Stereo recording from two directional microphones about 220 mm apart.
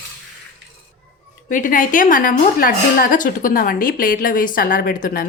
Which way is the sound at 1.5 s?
35° left (ahead or behind).